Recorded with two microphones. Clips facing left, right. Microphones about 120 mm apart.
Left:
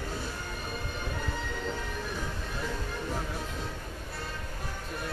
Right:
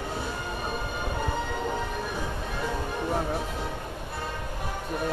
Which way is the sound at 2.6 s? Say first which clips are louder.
Right 6 dB; 60° right (ahead or behind).